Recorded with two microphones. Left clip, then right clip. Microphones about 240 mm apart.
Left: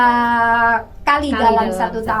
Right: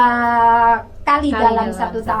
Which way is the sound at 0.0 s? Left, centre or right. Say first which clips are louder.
Right 1 dB; left.